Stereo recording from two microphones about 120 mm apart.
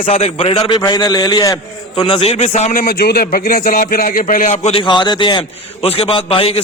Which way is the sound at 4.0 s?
90° left.